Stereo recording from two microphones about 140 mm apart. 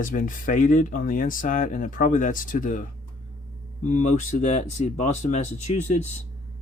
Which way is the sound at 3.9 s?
65° left (ahead or behind).